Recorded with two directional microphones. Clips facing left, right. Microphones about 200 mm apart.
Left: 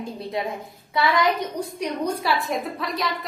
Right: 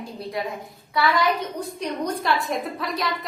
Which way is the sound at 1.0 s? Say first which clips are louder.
Left 1 dB; 20° left (ahead or behind).